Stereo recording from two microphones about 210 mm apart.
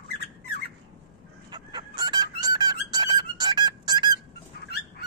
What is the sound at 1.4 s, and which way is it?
Squeak, 20° right (ahead or behind).